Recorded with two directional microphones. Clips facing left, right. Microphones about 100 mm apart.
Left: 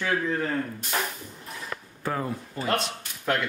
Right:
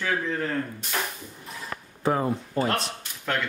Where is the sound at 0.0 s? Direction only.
5° left (ahead or behind).